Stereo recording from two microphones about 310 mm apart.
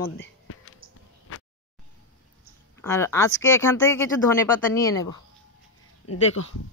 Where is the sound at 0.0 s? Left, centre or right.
Left.